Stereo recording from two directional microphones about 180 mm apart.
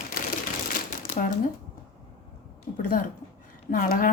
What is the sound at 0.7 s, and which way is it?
Crumpling, 50° left (ahead or behind).